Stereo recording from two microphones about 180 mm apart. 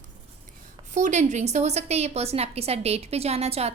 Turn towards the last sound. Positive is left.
turn(degrees=-35)  # may be behind; listen again after turning